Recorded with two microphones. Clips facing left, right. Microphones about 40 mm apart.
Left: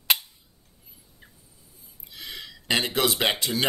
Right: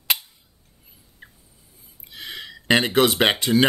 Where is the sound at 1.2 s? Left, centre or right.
Right.